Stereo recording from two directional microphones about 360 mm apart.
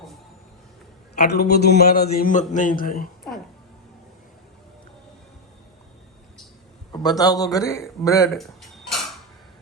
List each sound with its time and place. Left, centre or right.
1.2 s a man's voice: left
6.9 s a man's voice: centre